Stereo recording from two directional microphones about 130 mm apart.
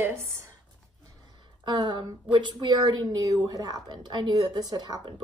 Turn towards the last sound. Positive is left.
turn(degrees=-35)  # may be behind; listen again after turning